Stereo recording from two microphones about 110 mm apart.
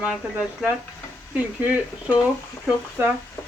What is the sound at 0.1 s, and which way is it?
Speech, 5° right (ahead or behind).